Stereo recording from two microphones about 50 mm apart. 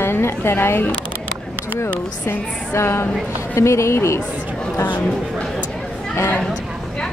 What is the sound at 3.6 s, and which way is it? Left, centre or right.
Speech, left.